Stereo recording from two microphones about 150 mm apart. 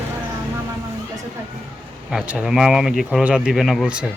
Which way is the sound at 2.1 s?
5° right (ahead or behind).